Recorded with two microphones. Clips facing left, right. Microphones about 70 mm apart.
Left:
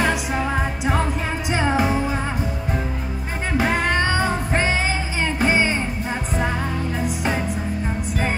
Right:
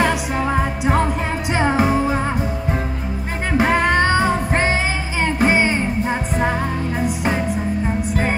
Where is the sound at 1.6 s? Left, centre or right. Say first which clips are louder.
Right 4 dB; right.